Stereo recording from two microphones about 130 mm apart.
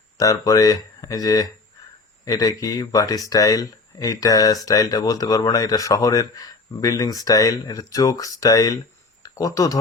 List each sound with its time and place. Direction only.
0.2 s speech: 25° left (ahead or behind)